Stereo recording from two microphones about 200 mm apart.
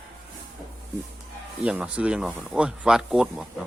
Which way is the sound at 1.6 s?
5° right (ahead or behind).